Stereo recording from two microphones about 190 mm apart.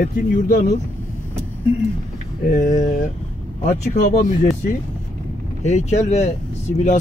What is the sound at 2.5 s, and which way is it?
Speech, 45° left (ahead or behind).